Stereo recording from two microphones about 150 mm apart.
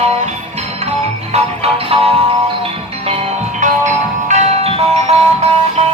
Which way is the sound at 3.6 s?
50° right (ahead or behind).